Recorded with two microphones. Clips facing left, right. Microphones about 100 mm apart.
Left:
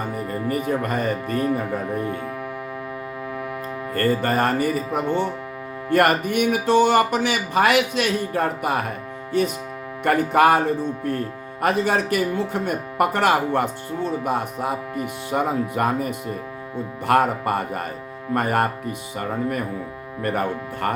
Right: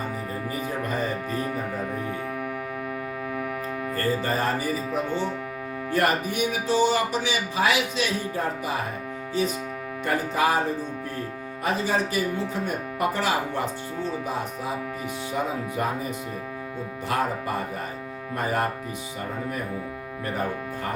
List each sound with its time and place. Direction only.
0.4 s speech: 65° left (ahead or behind)
3.9 s speech: 60° left (ahead or behind)